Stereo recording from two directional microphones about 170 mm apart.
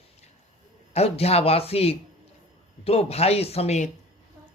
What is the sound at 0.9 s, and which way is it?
Speech, 35° left (ahead or behind).